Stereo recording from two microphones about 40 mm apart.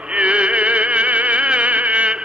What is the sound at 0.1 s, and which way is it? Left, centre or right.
Music, right.